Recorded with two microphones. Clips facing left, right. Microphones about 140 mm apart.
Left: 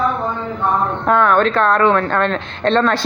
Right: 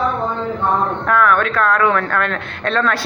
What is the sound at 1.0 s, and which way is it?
Speech, 25° left (ahead or behind).